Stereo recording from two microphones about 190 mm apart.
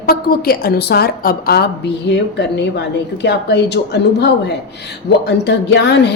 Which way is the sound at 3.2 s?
65° left (ahead or behind).